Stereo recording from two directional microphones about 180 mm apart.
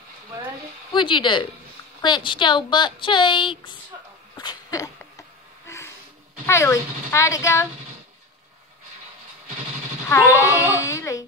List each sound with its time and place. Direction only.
0.9 s speech: 25° left (ahead or behind)
4.4 s a sound: 20° left (ahead or behind)
6.4 s a woman's voice: 15° left (ahead or behind)
10.0 s a woman's voice: 15° left (ahead or behind)